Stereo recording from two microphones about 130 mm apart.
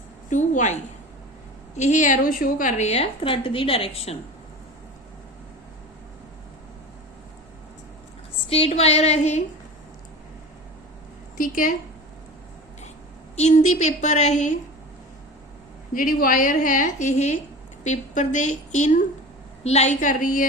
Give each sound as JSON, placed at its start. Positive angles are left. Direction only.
{"t": 0.3, "sound": "a woman's voice", "side_deg": 70}
{"t": 8.4, "sound": "a woman's voice", "side_deg": 50}
{"t": 11.3, "sound": "a woman's voice", "side_deg": 90}
{"t": 13.3, "sound": "a woman's voice", "side_deg": 60}
{"t": 15.9, "sound": "a woman's voice", "side_deg": 90}
{"t": 19.6, "sound": "a woman's voice", "side_deg": 60}